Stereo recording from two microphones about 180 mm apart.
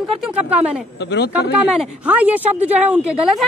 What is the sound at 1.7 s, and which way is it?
Speech, 10° right (ahead or behind).